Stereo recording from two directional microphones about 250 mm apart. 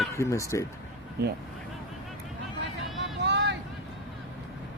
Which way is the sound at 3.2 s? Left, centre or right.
Right.